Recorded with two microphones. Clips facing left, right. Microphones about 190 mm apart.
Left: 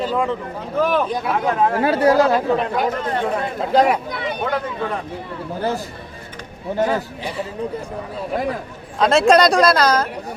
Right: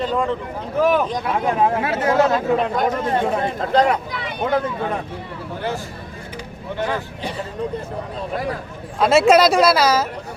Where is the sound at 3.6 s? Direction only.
10° left (ahead or behind).